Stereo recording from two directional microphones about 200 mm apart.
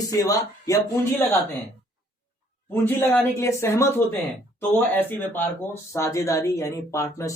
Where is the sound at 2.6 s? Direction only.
10° left (ahead or behind).